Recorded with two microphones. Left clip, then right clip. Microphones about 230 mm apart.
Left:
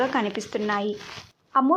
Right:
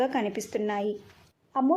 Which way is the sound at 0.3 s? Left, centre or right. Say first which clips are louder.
Left 2 dB; centre.